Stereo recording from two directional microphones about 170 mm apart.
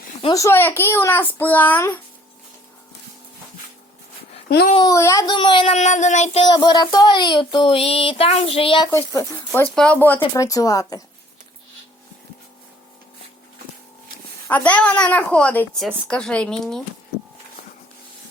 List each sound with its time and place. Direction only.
0.3 s a woman's voice: 15° left (ahead or behind)
4.4 s a child's voice: 60° left (ahead or behind)
4.8 s child singing: 20° left (ahead or behind)
5.7 s child singing: 45° left (ahead or behind)
6.4 s child singing: 25° left (ahead or behind)
8.5 s speech: 30° left (ahead or behind)
8.9 s a woman's voice: 15° left (ahead or behind)
10.2 s child singing: 20° left (ahead or behind)
14.4 s a woman's voice: 10° left (ahead or behind)